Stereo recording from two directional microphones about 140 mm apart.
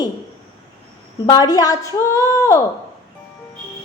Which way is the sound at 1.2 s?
30° left (ahead or behind).